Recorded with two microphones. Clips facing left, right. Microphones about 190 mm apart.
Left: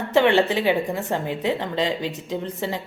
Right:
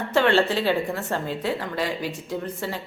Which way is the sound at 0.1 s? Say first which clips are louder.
Left 2 dB; 15° left (ahead or behind).